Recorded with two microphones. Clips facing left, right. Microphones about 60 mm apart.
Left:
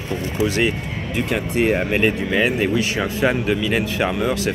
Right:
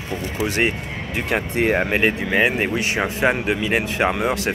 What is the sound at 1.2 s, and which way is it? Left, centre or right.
Speech, right.